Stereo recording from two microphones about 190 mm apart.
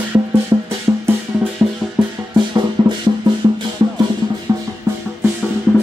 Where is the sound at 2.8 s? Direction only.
20° right (ahead or behind).